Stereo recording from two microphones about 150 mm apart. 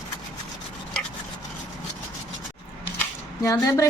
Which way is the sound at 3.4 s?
20° left (ahead or behind).